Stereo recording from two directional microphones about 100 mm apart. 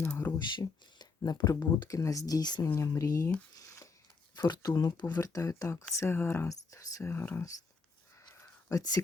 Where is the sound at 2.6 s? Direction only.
30° left (ahead or behind).